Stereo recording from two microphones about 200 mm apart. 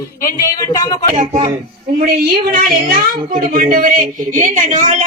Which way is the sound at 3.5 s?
45° right (ahead or behind).